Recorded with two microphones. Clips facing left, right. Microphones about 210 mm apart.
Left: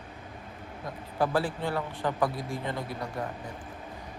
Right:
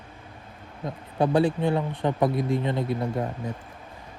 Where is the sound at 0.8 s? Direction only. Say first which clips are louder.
Right 4 dB; 25° right (ahead or behind).